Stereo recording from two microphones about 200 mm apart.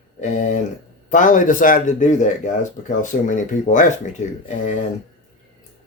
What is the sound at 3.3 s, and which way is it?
Speech, 40° left (ahead or behind).